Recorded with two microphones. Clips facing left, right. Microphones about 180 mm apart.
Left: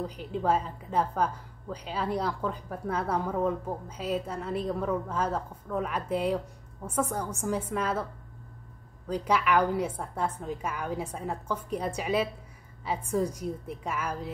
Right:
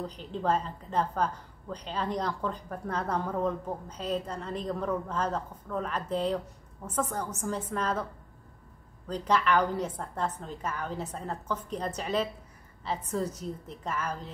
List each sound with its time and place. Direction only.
0.0 s a woman's voice: 10° left (ahead or behind)
9.0 s a woman's voice: 10° left (ahead or behind)